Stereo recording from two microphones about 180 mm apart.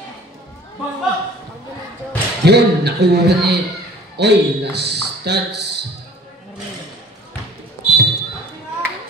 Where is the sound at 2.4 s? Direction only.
65° right (ahead or behind).